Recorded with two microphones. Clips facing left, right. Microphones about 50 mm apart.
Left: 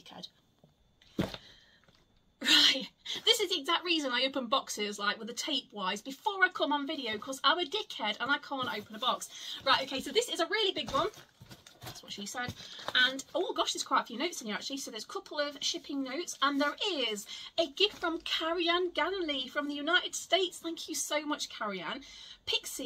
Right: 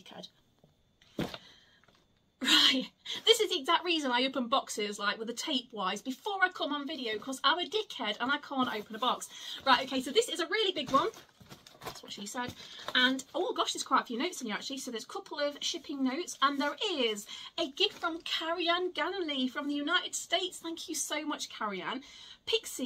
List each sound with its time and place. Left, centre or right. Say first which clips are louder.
2.4 s a woman's voice: even; centre
5.3 s speech: right 2 dB; centre
7.4 s a woman's voice: even; centre; by 9.5 s right
9.5 s a woman's voice: right 2 dB; centre
18.0 s a woman's voice: left 1 dB; centre